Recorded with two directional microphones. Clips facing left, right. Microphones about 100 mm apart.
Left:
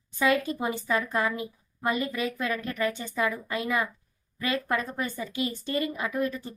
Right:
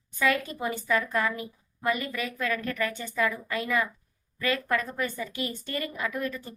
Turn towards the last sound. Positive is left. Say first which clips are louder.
# left 3 dB
turn(degrees=25)  # may be behind; listen again after turning